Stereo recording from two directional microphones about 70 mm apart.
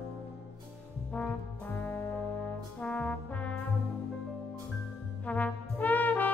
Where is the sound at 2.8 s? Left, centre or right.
Centre.